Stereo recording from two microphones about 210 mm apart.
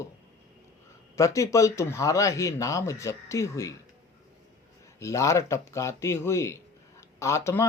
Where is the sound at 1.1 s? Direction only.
15° left (ahead or behind).